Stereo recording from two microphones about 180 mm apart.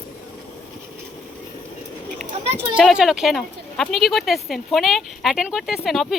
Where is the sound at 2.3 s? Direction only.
35° right (ahead or behind).